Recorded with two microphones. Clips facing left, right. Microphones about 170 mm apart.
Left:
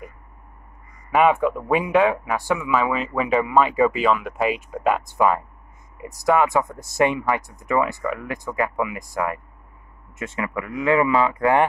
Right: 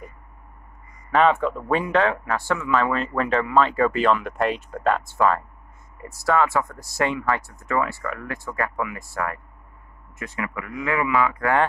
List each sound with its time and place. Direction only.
1.1 s speech: 10° left (ahead or behind)